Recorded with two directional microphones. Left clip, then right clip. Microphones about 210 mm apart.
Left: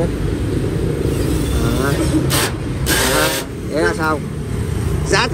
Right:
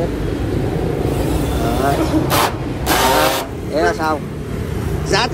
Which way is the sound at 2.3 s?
30° right (ahead or behind).